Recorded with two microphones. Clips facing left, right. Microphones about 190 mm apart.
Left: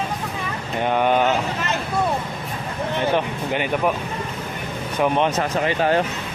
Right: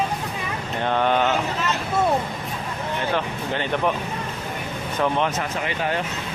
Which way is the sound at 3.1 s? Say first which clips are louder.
Left 3 dB; 15° left (ahead or behind).